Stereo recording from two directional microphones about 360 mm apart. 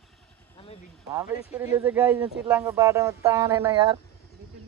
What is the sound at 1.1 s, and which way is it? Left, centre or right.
Speech, centre.